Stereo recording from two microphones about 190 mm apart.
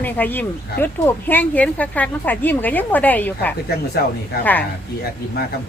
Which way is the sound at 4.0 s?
55° left (ahead or behind).